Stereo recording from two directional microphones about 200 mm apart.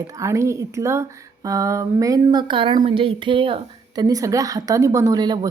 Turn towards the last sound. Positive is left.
turn(degrees=-20)  # may be behind; listen again after turning